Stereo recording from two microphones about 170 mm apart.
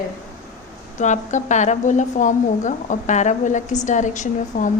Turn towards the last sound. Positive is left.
turn(degrees=45)  # may be behind; listen again after turning